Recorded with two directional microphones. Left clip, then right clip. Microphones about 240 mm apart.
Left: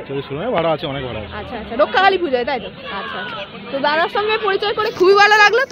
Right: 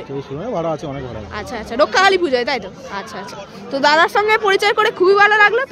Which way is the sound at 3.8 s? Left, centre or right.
Right.